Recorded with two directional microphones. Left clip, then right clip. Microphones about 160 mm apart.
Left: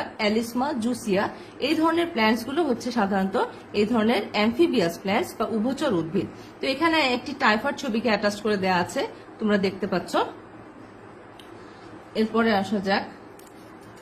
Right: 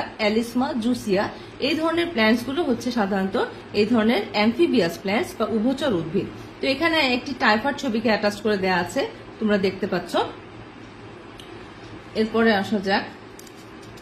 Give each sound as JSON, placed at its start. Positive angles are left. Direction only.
{"t": 0.2, "sound": "a woman's voice", "side_deg": 45}
{"t": 12.1, "sound": "a woman's voice", "side_deg": 35}